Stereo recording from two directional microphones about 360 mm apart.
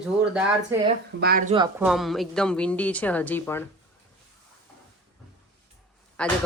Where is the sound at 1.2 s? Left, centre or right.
Right.